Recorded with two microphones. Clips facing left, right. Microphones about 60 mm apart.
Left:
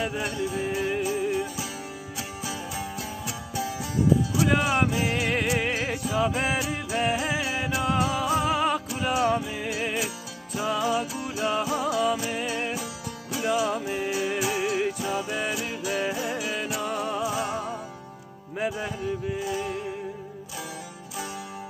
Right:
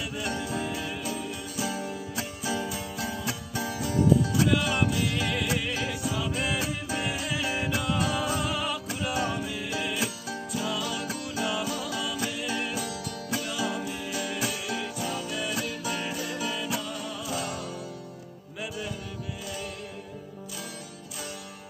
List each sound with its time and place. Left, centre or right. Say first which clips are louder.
0.0 s music: left 4 dB; left
4.5 s music: left 2 dB; left
14.1 s music: left 4 dB; left
16.8 s music: left 8 dB; left
19.4 s music: left 4 dB; left